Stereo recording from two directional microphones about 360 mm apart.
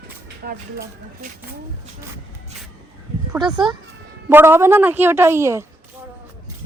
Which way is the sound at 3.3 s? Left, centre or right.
Centre.